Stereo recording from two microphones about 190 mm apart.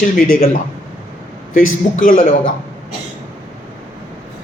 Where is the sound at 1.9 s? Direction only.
40° left (ahead or behind).